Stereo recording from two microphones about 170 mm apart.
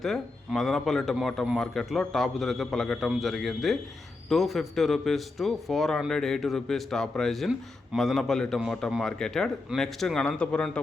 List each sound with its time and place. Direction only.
0.0 s a man's voice: centre (ahead or behind)